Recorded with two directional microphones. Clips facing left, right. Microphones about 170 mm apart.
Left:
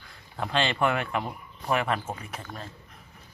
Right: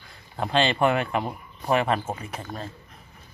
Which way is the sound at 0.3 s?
25° right (ahead or behind).